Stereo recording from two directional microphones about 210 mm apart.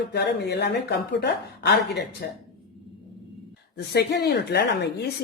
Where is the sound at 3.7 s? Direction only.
50° left (ahead or behind).